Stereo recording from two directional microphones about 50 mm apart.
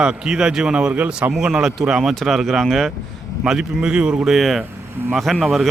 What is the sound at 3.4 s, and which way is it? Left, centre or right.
Speech, centre.